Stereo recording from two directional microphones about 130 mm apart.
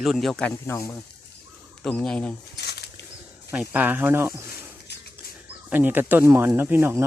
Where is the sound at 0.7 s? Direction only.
25° left (ahead or behind).